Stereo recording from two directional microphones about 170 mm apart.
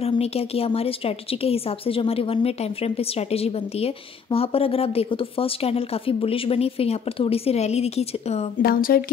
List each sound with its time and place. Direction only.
0.0 s a woman's voice: 35° left (ahead or behind)
8.6 s speech: 60° left (ahead or behind)